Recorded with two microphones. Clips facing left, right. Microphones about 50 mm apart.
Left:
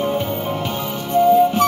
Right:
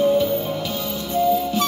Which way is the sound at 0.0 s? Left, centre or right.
Left.